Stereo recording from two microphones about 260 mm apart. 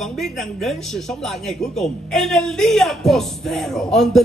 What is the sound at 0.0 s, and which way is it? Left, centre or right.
Speech, centre.